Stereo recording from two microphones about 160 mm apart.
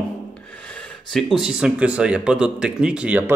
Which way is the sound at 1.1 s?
Centre (ahead or behind).